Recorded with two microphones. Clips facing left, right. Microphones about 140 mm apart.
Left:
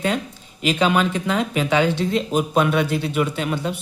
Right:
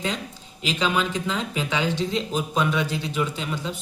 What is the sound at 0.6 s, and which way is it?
A woman's voice, 60° left (ahead or behind).